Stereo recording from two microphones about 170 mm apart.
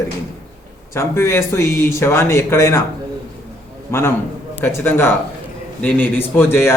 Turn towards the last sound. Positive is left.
turn(degrees=15)  # may be behind; listen again after turning